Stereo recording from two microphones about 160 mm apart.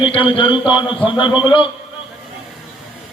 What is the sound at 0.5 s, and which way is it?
Speech, 10° right (ahead or behind).